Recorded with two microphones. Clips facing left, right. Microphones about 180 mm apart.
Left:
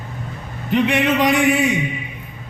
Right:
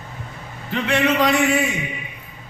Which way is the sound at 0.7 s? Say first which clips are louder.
Left 3 dB; 20° left (ahead or behind).